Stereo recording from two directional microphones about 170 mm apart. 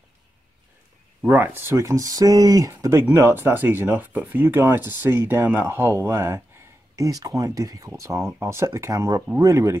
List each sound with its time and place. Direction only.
1.2 s speech: 10° right (ahead or behind)